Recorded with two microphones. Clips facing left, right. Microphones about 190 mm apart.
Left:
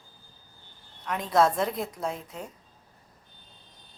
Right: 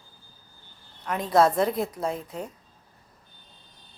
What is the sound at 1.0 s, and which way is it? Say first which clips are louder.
Speech: right 2 dB; centre (ahead or behind).